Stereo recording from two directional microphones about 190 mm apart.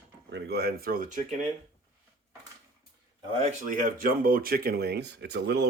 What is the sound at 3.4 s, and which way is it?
Speech, 40° right (ahead or behind).